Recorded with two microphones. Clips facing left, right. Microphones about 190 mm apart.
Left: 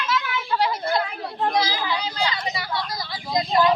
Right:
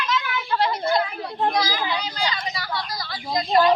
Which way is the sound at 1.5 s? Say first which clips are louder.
Even; 25° left (ahead or behind).